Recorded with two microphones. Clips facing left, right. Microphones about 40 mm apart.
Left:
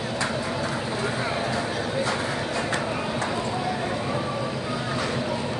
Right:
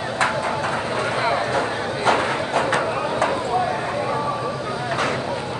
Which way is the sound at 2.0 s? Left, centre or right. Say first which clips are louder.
Right 7 dB; right.